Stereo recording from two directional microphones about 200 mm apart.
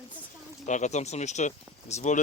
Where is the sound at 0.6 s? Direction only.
35° left (ahead or behind).